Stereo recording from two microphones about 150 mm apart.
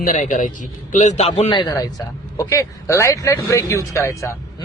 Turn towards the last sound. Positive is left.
turn(degrees=20)  # may be behind; listen again after turning